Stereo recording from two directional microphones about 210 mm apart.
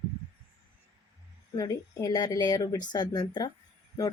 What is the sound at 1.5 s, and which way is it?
A woman's voice, 15° left (ahead or behind).